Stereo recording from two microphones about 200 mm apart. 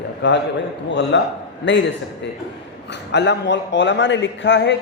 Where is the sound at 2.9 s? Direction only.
60° left (ahead or behind).